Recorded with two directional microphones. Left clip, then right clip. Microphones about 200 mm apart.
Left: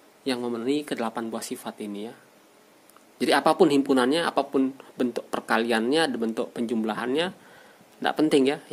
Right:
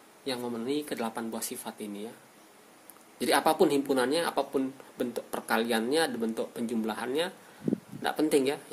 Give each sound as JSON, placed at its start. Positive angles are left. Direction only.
{"t": 0.2, "sound": "speech", "side_deg": 40}
{"t": 3.2, "sound": "speech", "side_deg": 40}